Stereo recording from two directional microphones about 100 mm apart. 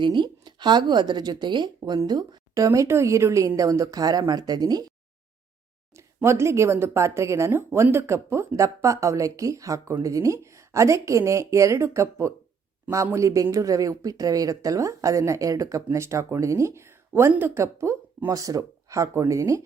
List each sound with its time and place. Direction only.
0.0 s a woman's voice: 50° right (ahead or behind)
1.8 s a woman's voice: 40° right (ahead or behind)
2.6 s a woman's voice: 30° right (ahead or behind)
6.2 s a woman's voice: 25° right (ahead or behind)